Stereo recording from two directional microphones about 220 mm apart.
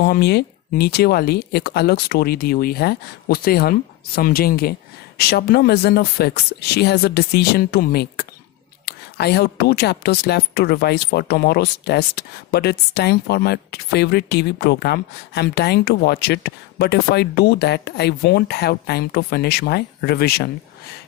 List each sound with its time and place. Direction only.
0.0 s a woman's voice: 50° left (ahead or behind)